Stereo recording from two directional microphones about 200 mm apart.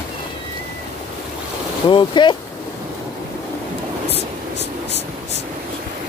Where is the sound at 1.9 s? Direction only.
25° left (ahead or behind).